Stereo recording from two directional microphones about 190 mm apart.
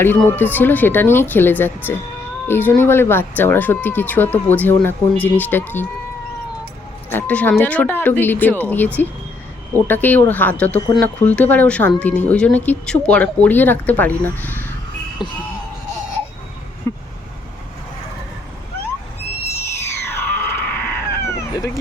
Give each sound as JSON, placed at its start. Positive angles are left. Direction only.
{"t": 0.0, "sound": "speech", "side_deg": 10}
{"t": 7.1, "sound": "speech", "side_deg": 10}
{"t": 15.2, "sound": "music", "side_deg": 25}
{"t": 16.9, "sound": "vehicle", "side_deg": 15}
{"t": 20.1, "sound": "a sound", "side_deg": 10}